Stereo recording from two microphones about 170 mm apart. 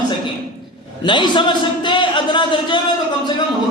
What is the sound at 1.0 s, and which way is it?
A man's voice, 25° left (ahead or behind).